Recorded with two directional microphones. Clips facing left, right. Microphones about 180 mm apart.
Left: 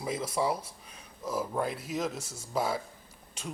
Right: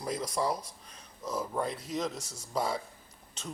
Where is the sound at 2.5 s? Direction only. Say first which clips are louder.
Left 1 dB; 5° left (ahead or behind).